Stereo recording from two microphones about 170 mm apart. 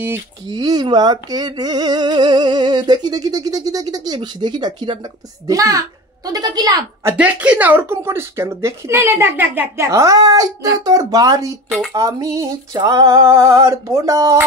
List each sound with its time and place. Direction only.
0.5 s speech: 25° right (ahead or behind)